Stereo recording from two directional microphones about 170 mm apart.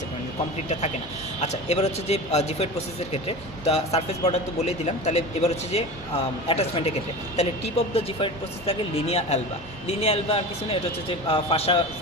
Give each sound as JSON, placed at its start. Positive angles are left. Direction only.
{"t": 1.7, "sound": "speech", "side_deg": 40}
{"t": 7.9, "sound": "speech", "side_deg": 35}